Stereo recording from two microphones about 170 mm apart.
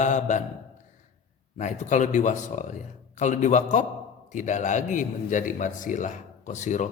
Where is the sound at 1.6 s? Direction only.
45° left (ahead or behind).